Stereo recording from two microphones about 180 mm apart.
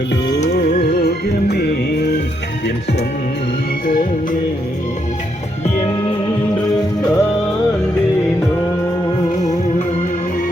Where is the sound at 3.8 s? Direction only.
50° left (ahead or behind).